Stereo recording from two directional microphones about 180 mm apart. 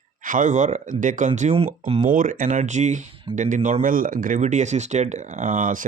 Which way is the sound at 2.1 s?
50° right (ahead or behind).